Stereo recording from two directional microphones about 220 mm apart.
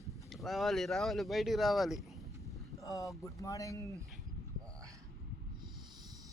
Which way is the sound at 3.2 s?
15° left (ahead or behind).